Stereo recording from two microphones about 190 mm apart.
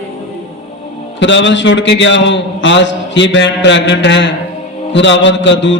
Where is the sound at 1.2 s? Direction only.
70° left (ahead or behind).